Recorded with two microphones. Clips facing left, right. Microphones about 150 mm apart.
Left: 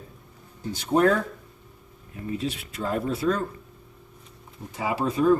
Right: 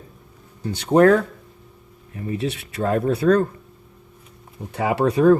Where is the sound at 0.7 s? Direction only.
70° right (ahead or behind).